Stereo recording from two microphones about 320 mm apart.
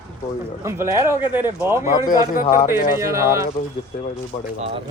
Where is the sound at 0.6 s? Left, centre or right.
Centre.